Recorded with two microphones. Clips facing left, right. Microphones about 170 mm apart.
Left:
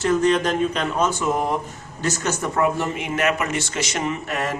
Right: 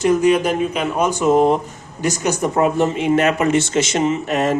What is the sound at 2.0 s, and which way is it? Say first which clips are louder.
Speech: right 5 dB; 15° right (ahead or behind).